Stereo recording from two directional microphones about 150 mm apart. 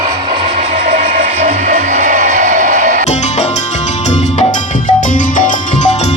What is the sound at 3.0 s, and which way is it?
Music, 50° left (ahead or behind).